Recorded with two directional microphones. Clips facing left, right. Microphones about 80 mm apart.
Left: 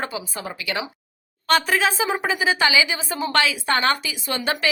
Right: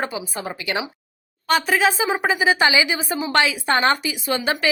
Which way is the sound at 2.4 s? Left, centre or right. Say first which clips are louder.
Right 1 dB; right.